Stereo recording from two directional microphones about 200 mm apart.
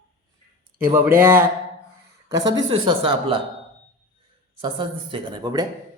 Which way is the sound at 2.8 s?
25° right (ahead or behind).